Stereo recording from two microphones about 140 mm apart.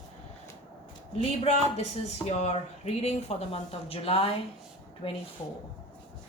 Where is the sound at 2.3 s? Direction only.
50° left (ahead or behind).